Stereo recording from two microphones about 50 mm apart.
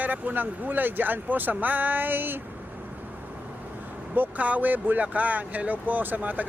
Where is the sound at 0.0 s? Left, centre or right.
Right.